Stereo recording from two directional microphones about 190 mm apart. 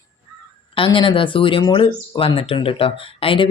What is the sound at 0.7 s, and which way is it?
Speech, 25° left (ahead or behind).